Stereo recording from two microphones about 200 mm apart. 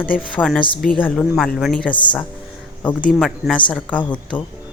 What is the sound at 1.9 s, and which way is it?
Speech, 25° left (ahead or behind).